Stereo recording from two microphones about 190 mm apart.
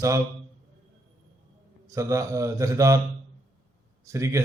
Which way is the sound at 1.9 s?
15° right (ahead or behind).